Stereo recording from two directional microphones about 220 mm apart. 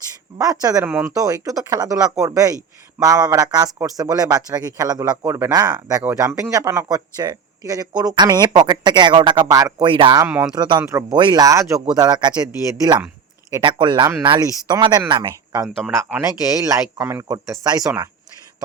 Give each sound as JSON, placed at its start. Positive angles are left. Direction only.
{"t": 0.3, "sound": "speech", "side_deg": -15}
{"t": 15.6, "sound": "speech", "side_deg": 0}
{"t": 16.2, "sound": "speech", "side_deg": -15}